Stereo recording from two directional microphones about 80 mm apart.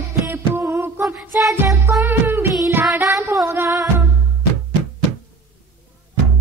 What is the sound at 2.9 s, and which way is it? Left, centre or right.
Music, right.